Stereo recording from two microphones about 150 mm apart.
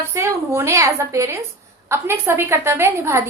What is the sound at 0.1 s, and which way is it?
A woman's voice, 20° right (ahead or behind).